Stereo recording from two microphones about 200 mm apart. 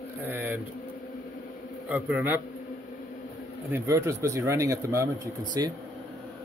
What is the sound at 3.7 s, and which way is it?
A man's voice, 15° right (ahead or behind).